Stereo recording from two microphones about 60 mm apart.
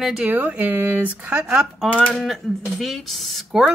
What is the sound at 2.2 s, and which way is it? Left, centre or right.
Speech, centre.